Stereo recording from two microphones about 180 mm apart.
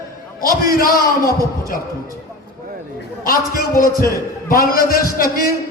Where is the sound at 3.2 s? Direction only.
50° left (ahead or behind).